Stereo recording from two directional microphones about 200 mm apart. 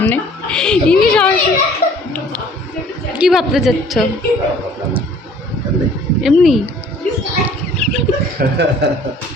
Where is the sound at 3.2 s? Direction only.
Centre (ahead or behind).